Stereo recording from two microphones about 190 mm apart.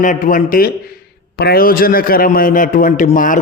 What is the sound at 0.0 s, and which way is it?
A man's voice, 45° left (ahead or behind).